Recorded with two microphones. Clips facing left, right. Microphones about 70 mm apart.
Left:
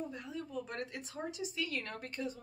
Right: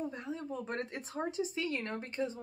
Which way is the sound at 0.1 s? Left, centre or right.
Right.